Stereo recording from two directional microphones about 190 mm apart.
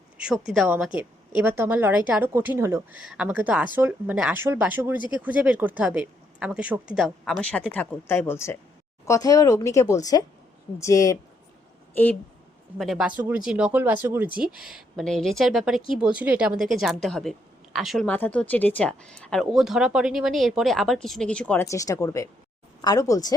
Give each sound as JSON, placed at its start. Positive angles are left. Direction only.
{"t": 0.2, "sound": "a woman's voice", "side_deg": -5}
{"t": 12.8, "sound": "speech", "side_deg": 0}